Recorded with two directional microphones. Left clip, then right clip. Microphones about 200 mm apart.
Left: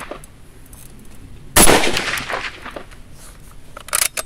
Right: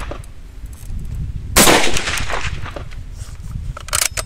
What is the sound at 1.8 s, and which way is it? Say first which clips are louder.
Gunshot: even; 60° right (ahead or behind).